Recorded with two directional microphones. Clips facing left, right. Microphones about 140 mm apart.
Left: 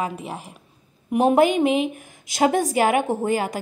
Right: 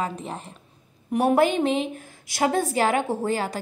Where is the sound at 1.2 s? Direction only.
20° left (ahead or behind).